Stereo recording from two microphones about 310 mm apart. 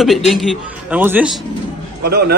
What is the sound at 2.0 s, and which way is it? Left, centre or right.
Speech, right.